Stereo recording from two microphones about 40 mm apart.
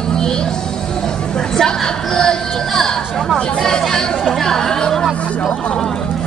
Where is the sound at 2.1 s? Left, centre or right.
Centre.